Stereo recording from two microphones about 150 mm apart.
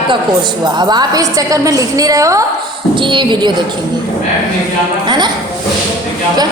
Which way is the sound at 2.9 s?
30° right (ahead or behind).